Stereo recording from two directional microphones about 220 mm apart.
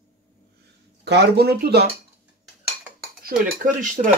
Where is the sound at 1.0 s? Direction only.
50° right (ahead or behind).